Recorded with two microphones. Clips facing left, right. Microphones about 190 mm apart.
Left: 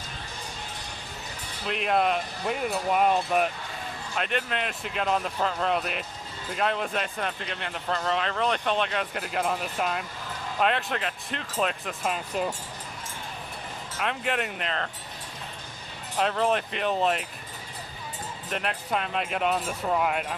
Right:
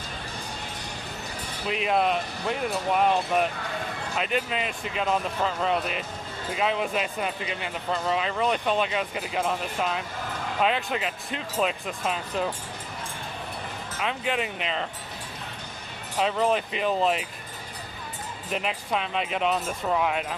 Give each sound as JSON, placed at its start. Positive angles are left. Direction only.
{"t": 1.6, "sound": "speech", "side_deg": 0}
{"t": 14.0, "sound": "speech", "side_deg": 0}
{"t": 16.1, "sound": "speech", "side_deg": 0}
{"t": 18.5, "sound": "speech", "side_deg": 0}